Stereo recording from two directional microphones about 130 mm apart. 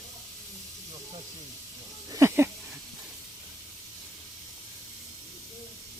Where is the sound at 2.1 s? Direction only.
25° right (ahead or behind).